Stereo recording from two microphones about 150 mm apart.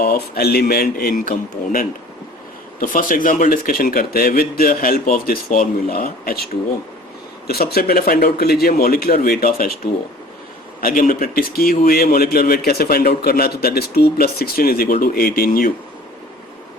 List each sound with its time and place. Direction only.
0.0 s a man's voice: 85° left